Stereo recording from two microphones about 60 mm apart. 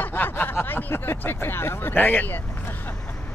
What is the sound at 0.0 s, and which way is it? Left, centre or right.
Speech, left.